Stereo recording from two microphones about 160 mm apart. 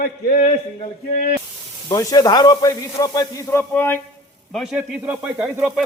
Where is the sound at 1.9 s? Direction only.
20° left (ahead or behind).